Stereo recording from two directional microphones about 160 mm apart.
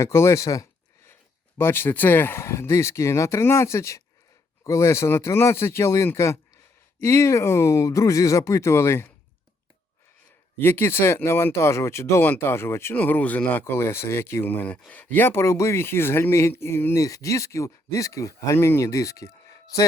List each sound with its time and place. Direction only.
0.0 s speech: 15° left (ahead or behind)
10.6 s speech: 15° left (ahead or behind)